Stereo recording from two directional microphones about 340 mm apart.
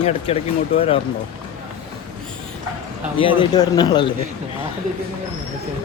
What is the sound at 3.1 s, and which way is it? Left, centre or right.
Speech, centre.